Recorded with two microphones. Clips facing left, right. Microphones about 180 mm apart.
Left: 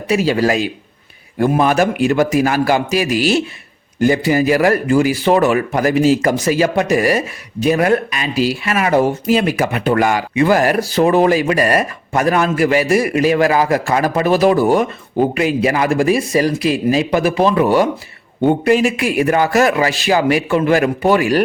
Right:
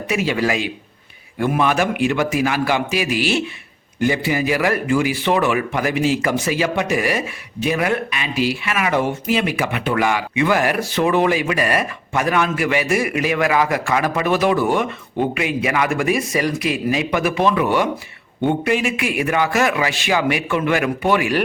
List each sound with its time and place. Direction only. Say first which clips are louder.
0.1 s a man's voice: left 5 dB; 35° left (ahead or behind)